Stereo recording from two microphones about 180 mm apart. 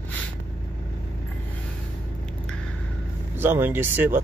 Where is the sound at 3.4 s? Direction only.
10° right (ahead or behind).